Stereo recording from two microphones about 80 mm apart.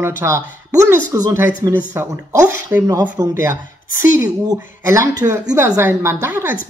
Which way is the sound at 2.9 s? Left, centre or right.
Right.